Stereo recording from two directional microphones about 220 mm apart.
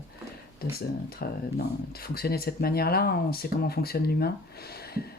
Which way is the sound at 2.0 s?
45° left (ahead or behind).